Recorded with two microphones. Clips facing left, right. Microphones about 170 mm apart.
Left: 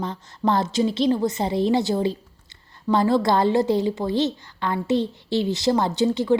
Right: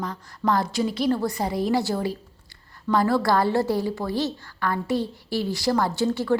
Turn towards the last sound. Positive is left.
turn(degrees=20)  # may be behind; listen again after turning